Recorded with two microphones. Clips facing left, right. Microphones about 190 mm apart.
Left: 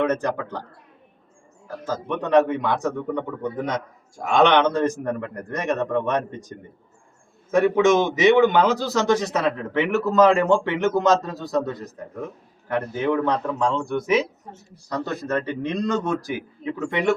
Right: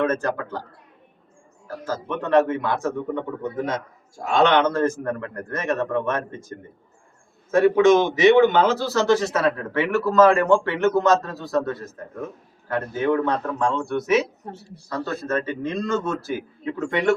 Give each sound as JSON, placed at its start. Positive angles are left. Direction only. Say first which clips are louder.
{"t": 0.0, "sound": "a man's voice", "louder": "even", "side_deg": 20}
{"t": 1.6, "sound": "a man's voice", "louder": "even", "side_deg": 15}
{"t": 4.3, "sound": "a man's voice", "louder": "left 1 dB", "side_deg": 15}
{"t": 7.5, "sound": "a man's voice", "louder": "right 2 dB", "side_deg": 20}